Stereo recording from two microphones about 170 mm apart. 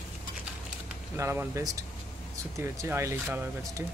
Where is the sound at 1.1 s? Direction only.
15° right (ahead or behind).